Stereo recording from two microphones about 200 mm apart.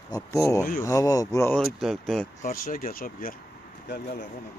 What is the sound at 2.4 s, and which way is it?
Speech, 45° left (ahead or behind).